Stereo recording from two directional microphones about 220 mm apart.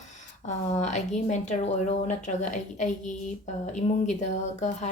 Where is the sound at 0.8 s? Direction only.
35° left (ahead or behind).